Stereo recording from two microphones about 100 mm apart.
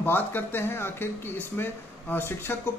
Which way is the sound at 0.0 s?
20° left (ahead or behind).